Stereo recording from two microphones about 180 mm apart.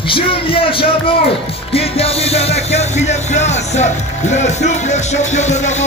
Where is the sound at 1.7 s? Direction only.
35° left (ahead or behind).